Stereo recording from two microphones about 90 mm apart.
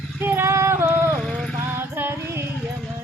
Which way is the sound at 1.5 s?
25° right (ahead or behind).